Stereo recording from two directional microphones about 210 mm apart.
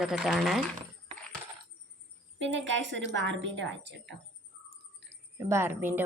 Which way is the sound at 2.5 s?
60° right (ahead or behind).